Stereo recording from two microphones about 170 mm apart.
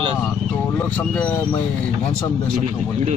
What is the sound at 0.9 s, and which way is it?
Speech, 5° left (ahead or behind).